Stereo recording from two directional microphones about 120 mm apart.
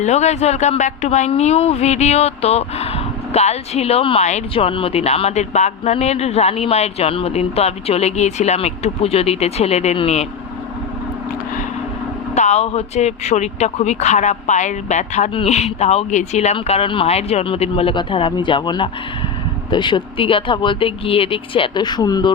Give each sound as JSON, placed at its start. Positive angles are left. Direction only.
{"t": 0.0, "sound": "speech", "side_deg": 70}
{"t": 1.3, "sound": "speech", "side_deg": 65}
{"t": 4.2, "sound": "speech", "side_deg": 70}
{"t": 4.5, "sound": "speech", "side_deg": 50}
{"t": 12.3, "sound": "speech", "side_deg": 70}
{"t": 16.6, "sound": "speech", "side_deg": 50}